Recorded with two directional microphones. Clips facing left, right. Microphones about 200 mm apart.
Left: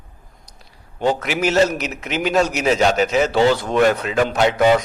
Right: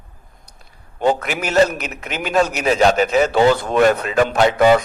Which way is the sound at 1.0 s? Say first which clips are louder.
Right 1 dB; 50° right (ahead or behind).